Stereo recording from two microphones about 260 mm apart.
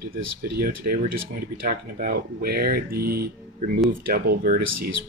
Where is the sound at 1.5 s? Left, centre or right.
Right.